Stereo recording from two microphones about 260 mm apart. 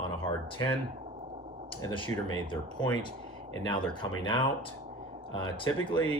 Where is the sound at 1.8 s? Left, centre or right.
Centre.